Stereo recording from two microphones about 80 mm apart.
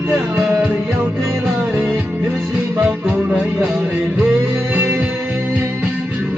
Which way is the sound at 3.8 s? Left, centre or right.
Right.